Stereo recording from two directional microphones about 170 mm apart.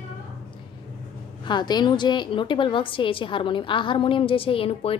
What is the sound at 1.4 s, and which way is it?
A woman's voice, 25° left (ahead or behind).